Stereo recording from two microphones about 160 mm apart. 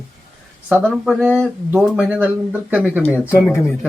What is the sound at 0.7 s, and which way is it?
Speech, 10° right (ahead or behind).